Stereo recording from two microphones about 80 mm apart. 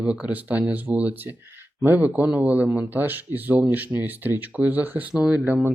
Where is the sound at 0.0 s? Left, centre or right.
Centre.